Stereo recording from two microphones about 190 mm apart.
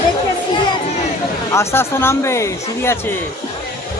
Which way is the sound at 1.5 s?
15° left (ahead or behind).